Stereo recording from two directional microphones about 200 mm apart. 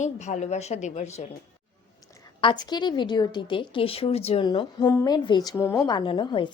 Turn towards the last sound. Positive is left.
turn(degrees=25)  # may be behind; listen again after turning